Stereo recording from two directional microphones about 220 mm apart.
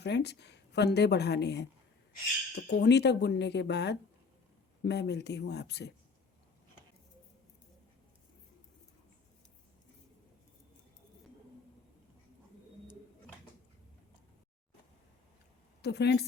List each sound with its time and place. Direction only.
0.0 s speech: 50° left (ahead or behind)
2.6 s speech: 50° left (ahead or behind)
15.8 s speech: 50° left (ahead or behind)